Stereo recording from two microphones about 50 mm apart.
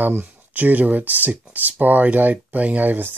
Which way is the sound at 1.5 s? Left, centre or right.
Right.